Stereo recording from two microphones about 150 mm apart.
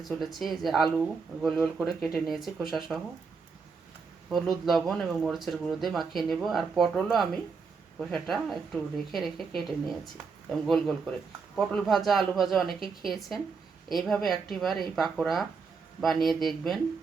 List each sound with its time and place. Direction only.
0.0 s speech: centre (ahead or behind)
4.3 s speech: centre (ahead or behind)